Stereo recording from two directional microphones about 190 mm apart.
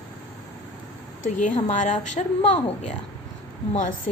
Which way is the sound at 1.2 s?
40° left (ahead or behind).